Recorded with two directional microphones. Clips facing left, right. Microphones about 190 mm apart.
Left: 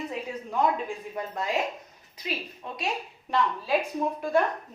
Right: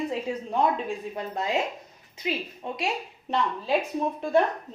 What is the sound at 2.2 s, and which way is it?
Speech, 25° right (ahead or behind).